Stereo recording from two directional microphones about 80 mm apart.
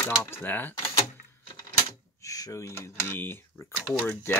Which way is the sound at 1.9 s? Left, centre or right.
Left.